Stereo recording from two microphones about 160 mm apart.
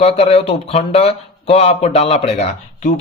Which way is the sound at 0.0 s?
40° left (ahead or behind).